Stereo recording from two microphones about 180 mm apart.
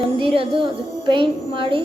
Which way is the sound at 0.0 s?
30° right (ahead or behind).